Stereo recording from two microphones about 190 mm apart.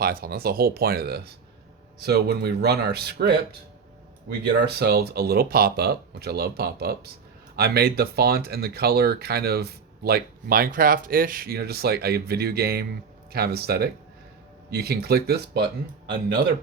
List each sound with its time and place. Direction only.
0.0 s speech: 50° right (ahead or behind)
4.5 s speech: 60° right (ahead or behind)